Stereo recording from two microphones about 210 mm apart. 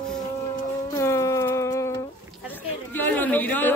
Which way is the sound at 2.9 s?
10° left (ahead or behind).